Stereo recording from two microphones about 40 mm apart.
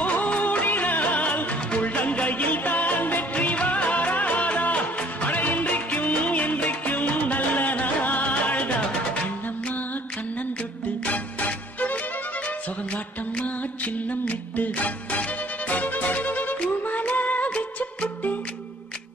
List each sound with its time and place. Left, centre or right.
0.0 s music: left
3.3 s music of bollywood: left
11.1 s music: left
17.5 s music: left